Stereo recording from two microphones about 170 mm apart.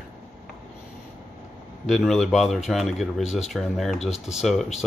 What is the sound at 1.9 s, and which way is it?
Speech, centre (ahead or behind).